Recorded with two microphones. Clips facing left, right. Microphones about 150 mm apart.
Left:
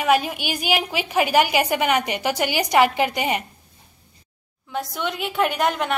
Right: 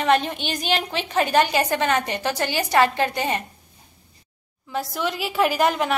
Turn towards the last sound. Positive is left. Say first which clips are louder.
# right 2 dB
turn(degrees=0)  # may be behind; listen again after turning